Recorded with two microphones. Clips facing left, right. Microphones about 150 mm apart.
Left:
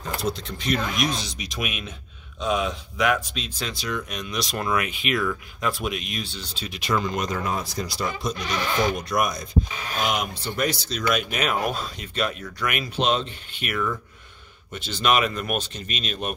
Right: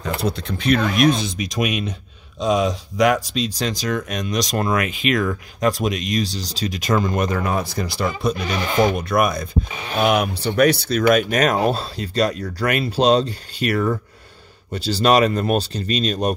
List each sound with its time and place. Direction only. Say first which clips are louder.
0.0 s speech: right 4 dB; 60° right (ahead or behind)
1.5 s speech: right 9 dB; 40° right (ahead or behind)
4.7 s speech: right 5 dB; 90° right
5.1 s speech: right 4 dB; 45° right (ahead or behind)